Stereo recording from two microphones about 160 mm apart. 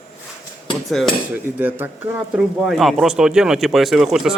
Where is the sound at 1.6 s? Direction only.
10° right (ahead or behind).